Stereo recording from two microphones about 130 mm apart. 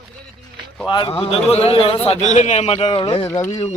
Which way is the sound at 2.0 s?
65° left (ahead or behind).